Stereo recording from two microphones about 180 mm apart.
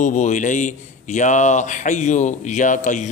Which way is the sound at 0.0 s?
45° left (ahead or behind).